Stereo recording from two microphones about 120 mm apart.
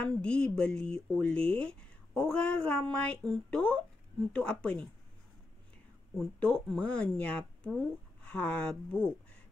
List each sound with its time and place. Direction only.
0.0 s speech: 10° left (ahead or behind)
6.1 s speech: 5° left (ahead or behind)